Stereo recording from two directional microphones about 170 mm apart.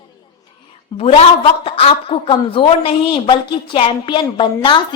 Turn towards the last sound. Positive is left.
turn(degrees=25)  # may be behind; listen again after turning